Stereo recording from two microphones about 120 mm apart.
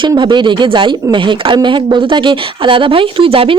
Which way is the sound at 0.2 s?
40° right (ahead or behind).